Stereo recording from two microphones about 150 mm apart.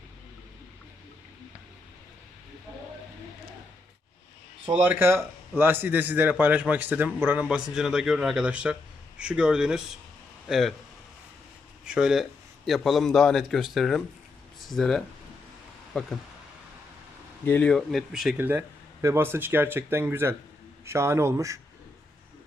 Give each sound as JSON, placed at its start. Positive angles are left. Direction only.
{"t": 4.7, "sound": "a man's voice", "side_deg": -15}
{"t": 11.9, "sound": "a man's voice", "side_deg": -5}
{"t": 17.4, "sound": "a man's voice", "side_deg": 10}